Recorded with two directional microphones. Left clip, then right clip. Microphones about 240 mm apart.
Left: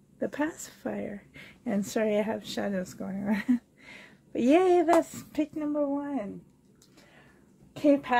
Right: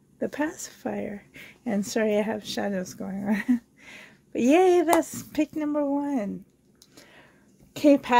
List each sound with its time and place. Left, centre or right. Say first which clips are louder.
0.2 s a woman's voice: right 2 dB; right
7.7 s a woman's voice: right 4 dB; right